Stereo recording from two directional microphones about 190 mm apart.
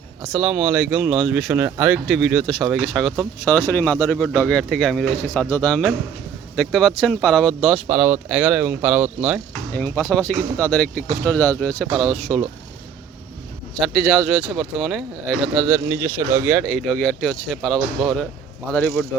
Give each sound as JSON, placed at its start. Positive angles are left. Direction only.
{"t": 0.3, "sound": "speech", "side_deg": -5}
{"t": 7.9, "sound": "speech", "side_deg": -10}
{"t": 9.7, "sound": "speech", "side_deg": 10}
{"t": 13.8, "sound": "speech", "side_deg": 0}